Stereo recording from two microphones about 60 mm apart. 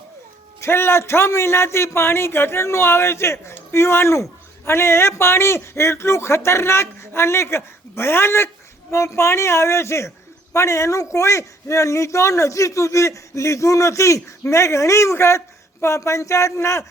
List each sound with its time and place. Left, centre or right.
0.6 s a man's voice: left